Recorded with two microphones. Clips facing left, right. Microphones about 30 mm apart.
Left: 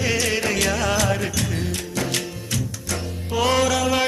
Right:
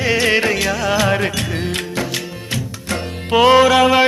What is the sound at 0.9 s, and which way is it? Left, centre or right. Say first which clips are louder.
Music: right 5 dB; right.